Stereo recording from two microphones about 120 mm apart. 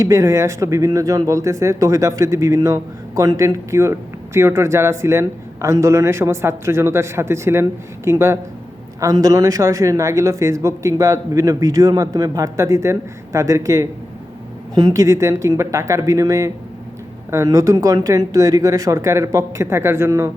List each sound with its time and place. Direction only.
0.0 s speech: 25° right (ahead or behind)